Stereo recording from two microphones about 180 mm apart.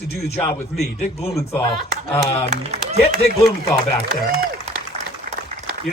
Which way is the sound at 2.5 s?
35° right (ahead or behind).